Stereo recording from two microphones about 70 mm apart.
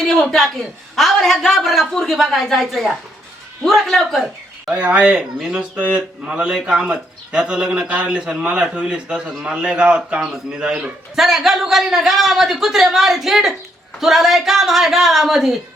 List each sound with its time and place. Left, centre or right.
0.0 s a man's voice: centre
4.7 s a man's voice: centre